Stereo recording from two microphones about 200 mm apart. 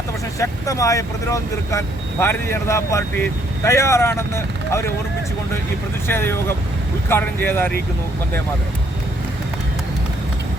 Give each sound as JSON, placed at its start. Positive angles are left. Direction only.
{"t": 0.3, "sound": "speech", "side_deg": 15}
{"t": 6.1, "sound": "speech", "side_deg": 10}